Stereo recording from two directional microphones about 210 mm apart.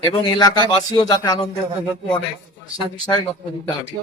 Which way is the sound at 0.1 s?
20° left (ahead or behind).